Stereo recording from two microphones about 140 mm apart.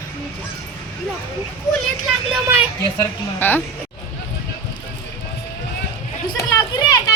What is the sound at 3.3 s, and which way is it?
Speech, 15° left (ahead or behind).